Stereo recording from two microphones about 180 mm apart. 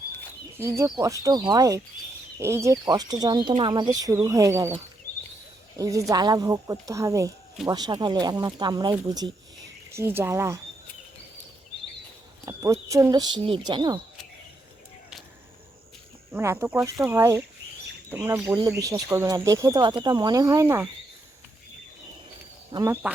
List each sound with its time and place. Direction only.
0.5 s speech: 15° right (ahead or behind)
12.5 s speech: 20° right (ahead or behind)
16.3 s speech: 15° right (ahead or behind)
22.7 s speech: 20° right (ahead or behind)